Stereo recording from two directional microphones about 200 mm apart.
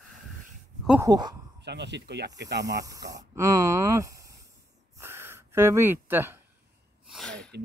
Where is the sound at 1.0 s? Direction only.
20° right (ahead or behind).